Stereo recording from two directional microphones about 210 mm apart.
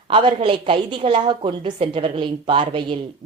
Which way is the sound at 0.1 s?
25° right (ahead or behind).